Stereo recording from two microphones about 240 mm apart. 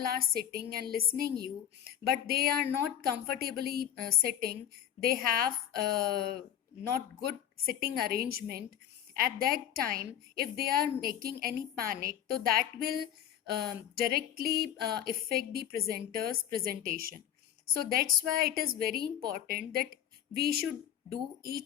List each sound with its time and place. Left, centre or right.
0.0 s a woman's voice: right